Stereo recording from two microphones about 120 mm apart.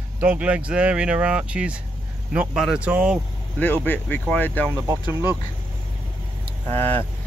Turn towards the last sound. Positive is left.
turn(degrees=-55)  # may be behind; listen again after turning